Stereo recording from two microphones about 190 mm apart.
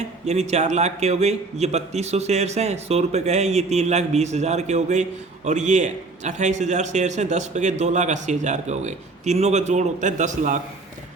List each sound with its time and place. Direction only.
0.3 s a man's voice: 35° right (ahead or behind)